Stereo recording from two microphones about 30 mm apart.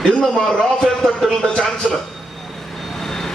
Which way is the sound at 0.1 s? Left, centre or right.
Left.